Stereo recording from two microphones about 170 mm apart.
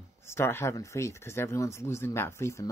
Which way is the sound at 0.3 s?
15° left (ahead or behind).